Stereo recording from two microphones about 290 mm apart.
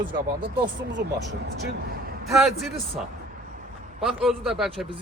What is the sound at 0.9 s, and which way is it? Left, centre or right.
Speech, right.